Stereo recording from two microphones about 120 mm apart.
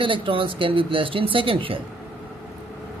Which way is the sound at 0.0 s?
45° right (ahead or behind).